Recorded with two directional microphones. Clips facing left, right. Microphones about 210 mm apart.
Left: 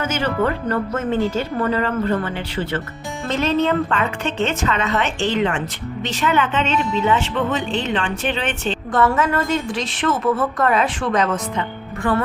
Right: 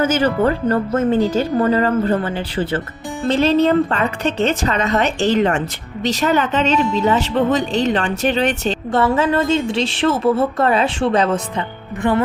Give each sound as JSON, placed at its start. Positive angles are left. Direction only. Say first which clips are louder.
{"t": 0.0, "sound": "a woman's voice", "louder": "right 5 dB", "side_deg": -35}
{"t": 8.9, "sound": "a woman's voice", "louder": "right 2 dB", "side_deg": -30}